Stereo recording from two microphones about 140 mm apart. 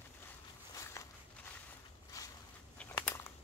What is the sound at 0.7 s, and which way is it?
Walk, 20° left (ahead or behind).